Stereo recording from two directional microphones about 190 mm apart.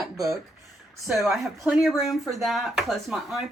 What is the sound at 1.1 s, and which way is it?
A woman's voice, centre (ahead or behind).